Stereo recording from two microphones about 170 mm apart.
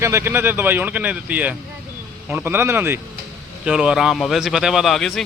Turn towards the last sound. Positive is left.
turn(degrees=0)  # may be behind; listen again after turning